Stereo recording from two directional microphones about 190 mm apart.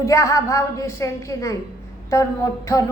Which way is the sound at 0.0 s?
15° left (ahead or behind).